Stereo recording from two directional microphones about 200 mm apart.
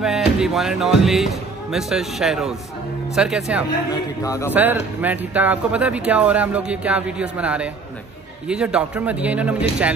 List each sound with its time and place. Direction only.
0.0 s speech: 5° right (ahead or behind)
3.9 s a man's voice: 15° left (ahead or behind)
4.6 s speech: 10° right (ahead or behind)